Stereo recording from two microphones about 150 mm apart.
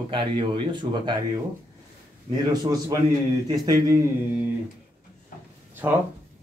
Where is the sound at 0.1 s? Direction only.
30° right (ahead or behind).